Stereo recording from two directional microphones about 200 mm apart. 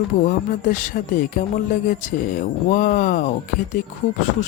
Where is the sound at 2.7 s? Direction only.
40° left (ahead or behind).